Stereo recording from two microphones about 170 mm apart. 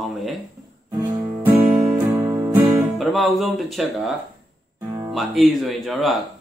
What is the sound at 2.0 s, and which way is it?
Music, 10° right (ahead or behind).